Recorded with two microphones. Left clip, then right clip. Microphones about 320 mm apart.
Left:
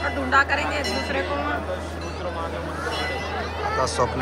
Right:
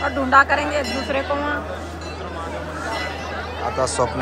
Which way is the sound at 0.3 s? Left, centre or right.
Right.